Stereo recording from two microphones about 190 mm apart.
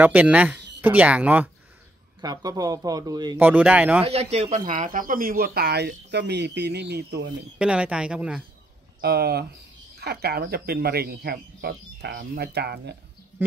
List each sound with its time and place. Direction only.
0.0 s speech: 10° right (ahead or behind)
2.2 s speech: 20° right (ahead or behind)
3.3 s speech: 10° right (ahead or behind)
4.0 s speech: 35° right (ahead or behind); by 7.3 s 60° right (ahead or behind)
7.5 s speech: 5° right (ahead or behind)
9.0 s speech: 55° right (ahead or behind)